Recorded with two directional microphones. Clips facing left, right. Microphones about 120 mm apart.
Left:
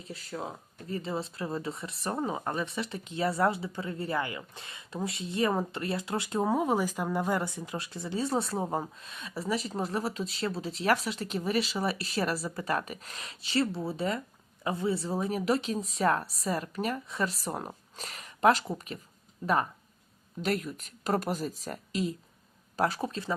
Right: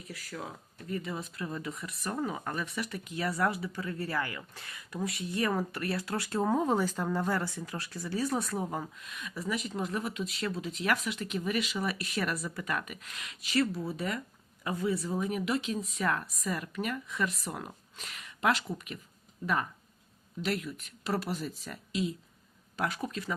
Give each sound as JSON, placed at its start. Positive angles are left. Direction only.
{"t": 0.0, "sound": "speech", "side_deg": 25}
{"t": 20.4, "sound": "speech", "side_deg": 45}